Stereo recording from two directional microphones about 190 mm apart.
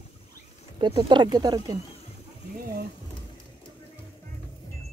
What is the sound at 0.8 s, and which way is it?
Speech, 25° right (ahead or behind).